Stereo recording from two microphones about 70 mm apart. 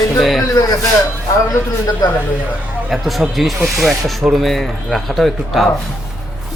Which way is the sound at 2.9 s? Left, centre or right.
Centre.